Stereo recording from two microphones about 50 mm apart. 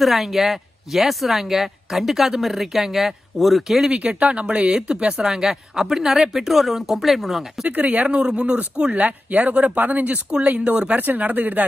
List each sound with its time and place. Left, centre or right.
0.0 s speech: centre
3.9 s speech: right
5.3 s speech: centre
7.6 s speech: right